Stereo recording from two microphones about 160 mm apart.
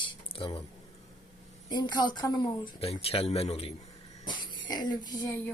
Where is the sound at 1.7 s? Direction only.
25° left (ahead or behind).